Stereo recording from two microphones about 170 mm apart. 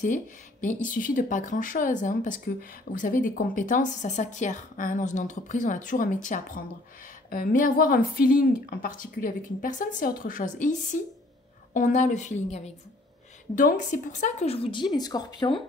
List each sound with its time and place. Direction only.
0.0 s a woman's voice: 45° left (ahead or behind); by 15.6 s 30° left (ahead or behind)